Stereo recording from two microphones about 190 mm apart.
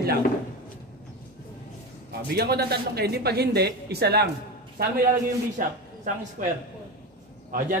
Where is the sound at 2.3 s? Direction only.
55° right (ahead or behind).